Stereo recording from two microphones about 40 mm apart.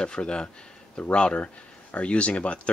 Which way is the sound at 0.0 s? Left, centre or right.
Left.